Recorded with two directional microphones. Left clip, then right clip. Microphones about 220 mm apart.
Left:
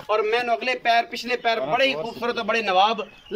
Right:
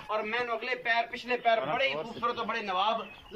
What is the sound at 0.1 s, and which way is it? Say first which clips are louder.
A man's voice: left 10 dB; 50° left (ahead or behind).